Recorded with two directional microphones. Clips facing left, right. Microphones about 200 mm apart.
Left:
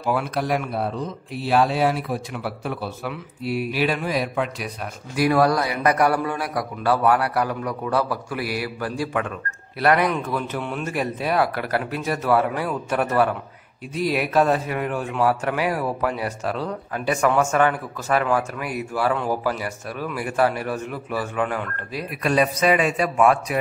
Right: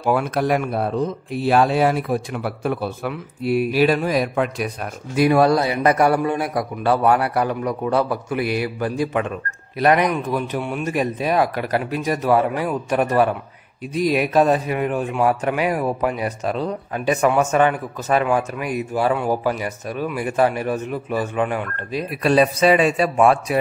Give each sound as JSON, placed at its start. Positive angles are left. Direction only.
{"t": 0.0, "sound": "speech", "side_deg": -50}
{"t": 5.1, "sound": "a man's voice", "side_deg": -25}